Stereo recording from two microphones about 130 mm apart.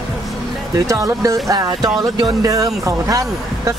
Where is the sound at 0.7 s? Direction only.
25° right (ahead or behind).